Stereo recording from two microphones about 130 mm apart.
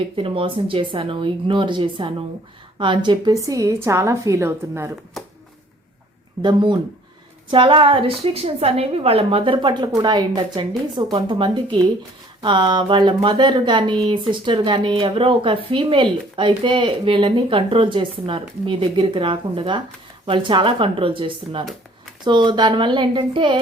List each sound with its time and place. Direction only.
0.2 s a woman's voice: 45° right (ahead or behind); by 4.9 s 20° right (ahead or behind)
6.4 s a woman's voice: 35° right (ahead or behind)